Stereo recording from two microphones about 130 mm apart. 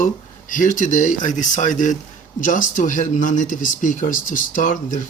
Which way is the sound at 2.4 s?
90° left.